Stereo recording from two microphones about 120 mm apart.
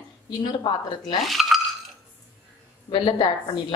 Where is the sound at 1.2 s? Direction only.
Centre (ahead or behind).